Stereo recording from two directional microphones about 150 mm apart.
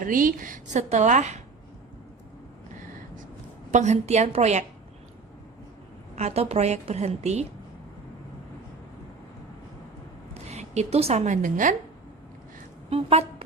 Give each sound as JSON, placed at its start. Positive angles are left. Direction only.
{"t": 0.0, "sound": "a woman's voice", "side_deg": -65}
{"t": 3.7, "sound": "a woman's voice", "side_deg": -50}
{"t": 6.1, "sound": "a woman's voice", "side_deg": -45}
{"t": 10.3, "sound": "speech", "side_deg": -45}
{"t": 12.9, "sound": "a woman's voice", "side_deg": -45}